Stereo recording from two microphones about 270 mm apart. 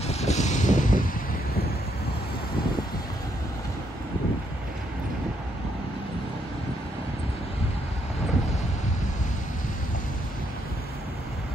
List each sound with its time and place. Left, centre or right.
0.0 s wind noise: left